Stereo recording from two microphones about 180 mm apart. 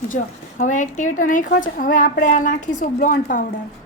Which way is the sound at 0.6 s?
45° left (ahead or behind).